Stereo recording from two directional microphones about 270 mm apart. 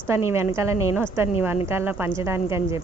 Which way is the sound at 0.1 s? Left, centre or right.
Centre.